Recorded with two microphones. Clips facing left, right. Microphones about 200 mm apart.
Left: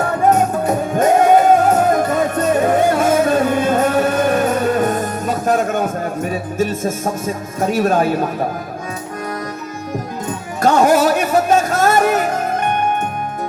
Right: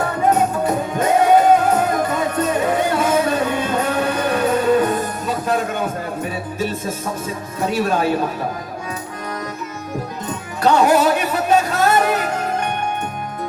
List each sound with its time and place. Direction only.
0.3 s music: 50° left (ahead or behind)
10.6 s music: 45° left (ahead or behind)